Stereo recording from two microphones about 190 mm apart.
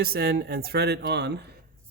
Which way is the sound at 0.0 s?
55° right (ahead or behind).